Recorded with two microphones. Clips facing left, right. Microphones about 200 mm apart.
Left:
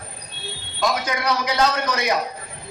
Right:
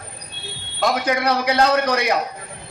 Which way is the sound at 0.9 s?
60° right (ahead or behind).